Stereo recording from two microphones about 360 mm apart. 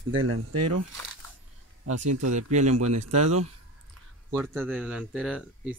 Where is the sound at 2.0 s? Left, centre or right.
Right.